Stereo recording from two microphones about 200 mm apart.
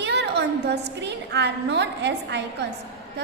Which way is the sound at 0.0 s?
60° right (ahead or behind).